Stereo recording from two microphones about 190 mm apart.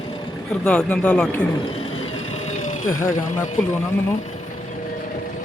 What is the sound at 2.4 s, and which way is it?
Vehicle, 40° left (ahead or behind).